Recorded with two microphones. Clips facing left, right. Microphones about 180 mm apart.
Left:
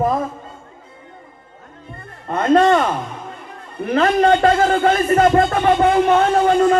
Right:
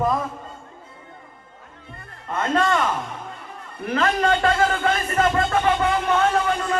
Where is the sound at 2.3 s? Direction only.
40° left (ahead or behind).